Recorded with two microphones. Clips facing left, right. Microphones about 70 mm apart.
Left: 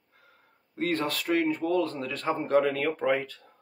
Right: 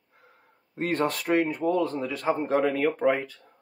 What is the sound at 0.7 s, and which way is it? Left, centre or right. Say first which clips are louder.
Speech: right 2 dB; right.